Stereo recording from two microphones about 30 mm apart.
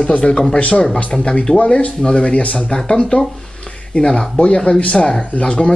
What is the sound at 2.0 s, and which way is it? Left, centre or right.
Speech, left.